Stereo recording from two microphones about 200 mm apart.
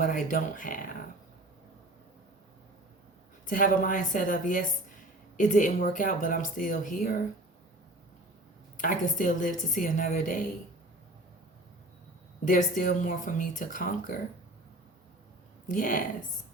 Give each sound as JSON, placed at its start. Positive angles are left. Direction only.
{"t": 0.0, "sound": "speech", "side_deg": 40}
{"t": 3.4, "sound": "speech", "side_deg": 40}
{"t": 8.8, "sound": "speech", "side_deg": 40}
{"t": 12.5, "sound": "speech", "side_deg": 40}
{"t": 15.7, "sound": "a woman's voice", "side_deg": 40}